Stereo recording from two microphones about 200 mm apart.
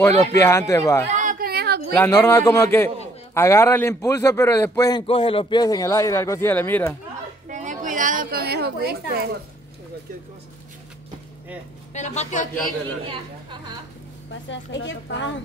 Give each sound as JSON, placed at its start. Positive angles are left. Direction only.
{"t": 0.2, "sound": "a man's voice", "side_deg": 15}
{"t": 1.1, "sound": "a sound", "side_deg": -40}
{"t": 2.0, "sound": "a man's voice", "side_deg": 10}
{"t": 5.0, "sound": "a man's voice", "side_deg": 30}
{"t": 7.4, "sound": "a sound", "side_deg": -40}
{"t": 11.9, "sound": "speech", "side_deg": 35}
{"t": 14.5, "sound": "a woman's voice", "side_deg": 65}